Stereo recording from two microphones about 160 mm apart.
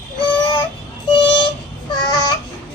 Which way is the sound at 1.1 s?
30° left (ahead or behind).